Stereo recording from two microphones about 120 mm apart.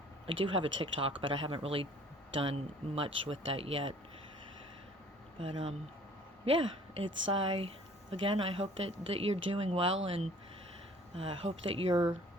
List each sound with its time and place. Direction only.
0.3 s speech: 45° right (ahead or behind)
6.4 s speech: 45° right (ahead or behind)
11.9 s speech: 35° right (ahead or behind)